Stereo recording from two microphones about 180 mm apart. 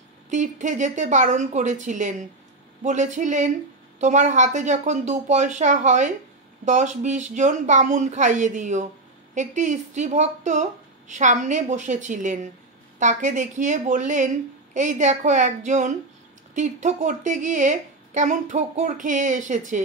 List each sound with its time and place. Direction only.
0.3 s a woman's voice: 45° right (ahead or behind)